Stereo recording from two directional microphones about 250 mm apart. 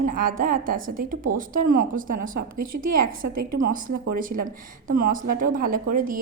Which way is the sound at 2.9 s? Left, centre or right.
Right.